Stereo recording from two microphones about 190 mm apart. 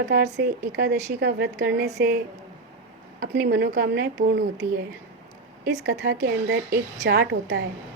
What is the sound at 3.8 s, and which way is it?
Speech, 55° right (ahead or behind).